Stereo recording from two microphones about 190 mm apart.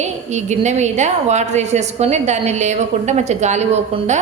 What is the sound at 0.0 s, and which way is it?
A woman's voice, 40° right (ahead or behind).